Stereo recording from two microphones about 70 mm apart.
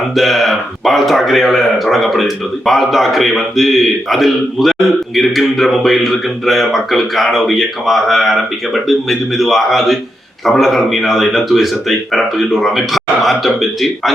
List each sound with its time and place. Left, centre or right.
0.1 s speech: centre